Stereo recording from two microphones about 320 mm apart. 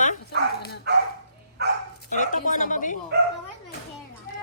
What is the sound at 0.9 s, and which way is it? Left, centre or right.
Dog, right.